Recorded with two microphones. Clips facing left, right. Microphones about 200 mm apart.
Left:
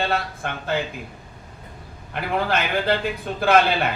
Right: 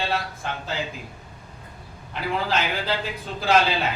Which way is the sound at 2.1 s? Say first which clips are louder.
Left 2 dB; 55° left (ahead or behind).